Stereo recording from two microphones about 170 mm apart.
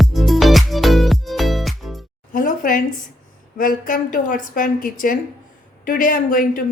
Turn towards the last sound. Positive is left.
turn(degrees=55)  # may be behind; listen again after turning